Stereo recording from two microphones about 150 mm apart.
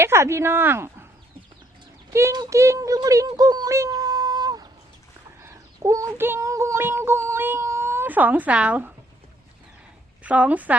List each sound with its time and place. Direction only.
0.0 s speech: 15° right (ahead or behind)
2.0 s speech: 20° right (ahead or behind)
5.4 s a sound: 20° right (ahead or behind)
10.2 s speech: 10° right (ahead or behind)